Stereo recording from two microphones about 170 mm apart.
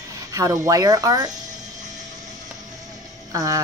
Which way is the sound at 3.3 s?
20° right (ahead or behind).